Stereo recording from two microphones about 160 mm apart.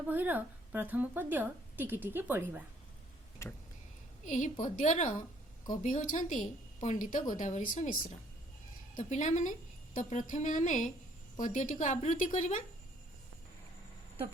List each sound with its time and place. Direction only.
0.1 s a woman's voice: 10° right (ahead or behind)
3.4 s vehicle: 15° left (ahead or behind)
4.3 s a woman's voice: 50° left (ahead or behind)
9.0 s a woman's voice: 50° left (ahead or behind)